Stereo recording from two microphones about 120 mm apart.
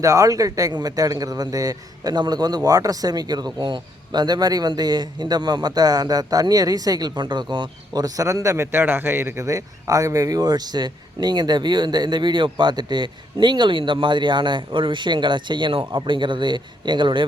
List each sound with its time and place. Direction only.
0.0 s a man's voice: 25° right (ahead or behind)